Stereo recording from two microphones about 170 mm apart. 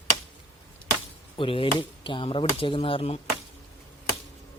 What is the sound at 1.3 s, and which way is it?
Speech, 30° left (ahead or behind).